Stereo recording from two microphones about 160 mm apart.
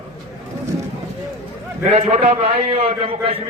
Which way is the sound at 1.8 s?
40° right (ahead or behind).